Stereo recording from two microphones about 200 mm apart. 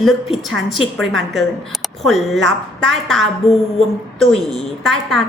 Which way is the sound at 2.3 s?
65° right (ahead or behind).